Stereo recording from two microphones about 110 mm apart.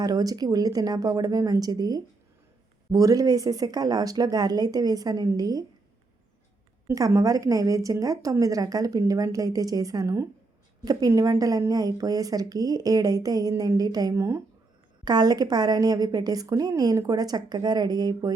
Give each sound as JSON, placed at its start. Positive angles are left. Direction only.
{"t": 0.0, "sound": "a woman's voice", "side_deg": -35}
{"t": 6.8, "sound": "a woman's voice", "side_deg": -30}
{"t": 15.0, "sound": "a woman's voice", "side_deg": -40}